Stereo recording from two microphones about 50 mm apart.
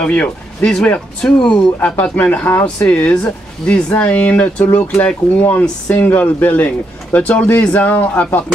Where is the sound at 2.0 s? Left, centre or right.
Left.